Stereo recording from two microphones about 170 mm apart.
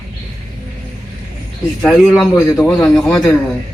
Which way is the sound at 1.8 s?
5° left (ahead or behind).